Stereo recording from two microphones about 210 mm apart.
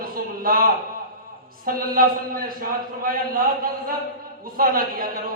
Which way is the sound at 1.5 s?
45° right (ahead or behind).